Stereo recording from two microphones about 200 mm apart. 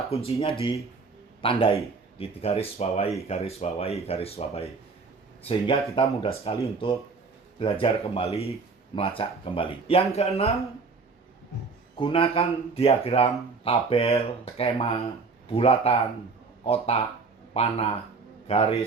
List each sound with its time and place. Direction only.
0.1 s a man's voice: 30° left (ahead or behind)
6.0 s speech: 30° left (ahead or behind)
7.6 s speech: 25° left (ahead or behind)
11.9 s speech: 25° left (ahead or behind)